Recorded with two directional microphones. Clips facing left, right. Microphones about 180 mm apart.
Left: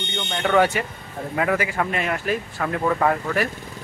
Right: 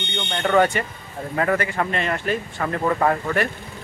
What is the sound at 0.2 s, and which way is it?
Speech, 5° left (ahead or behind).